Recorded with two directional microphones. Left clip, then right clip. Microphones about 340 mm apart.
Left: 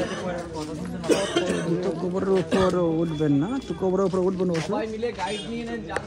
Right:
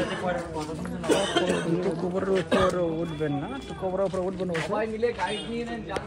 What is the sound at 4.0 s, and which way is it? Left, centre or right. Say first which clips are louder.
Speech: left 2 dB; centre.